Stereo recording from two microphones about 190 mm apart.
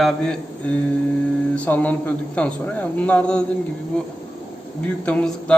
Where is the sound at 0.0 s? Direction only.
5° left (ahead or behind).